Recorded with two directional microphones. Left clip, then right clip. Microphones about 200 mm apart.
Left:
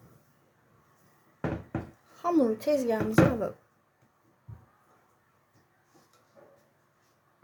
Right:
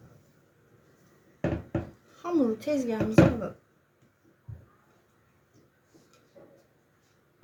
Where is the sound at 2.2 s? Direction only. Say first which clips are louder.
Left 2 dB; 45° left (ahead or behind).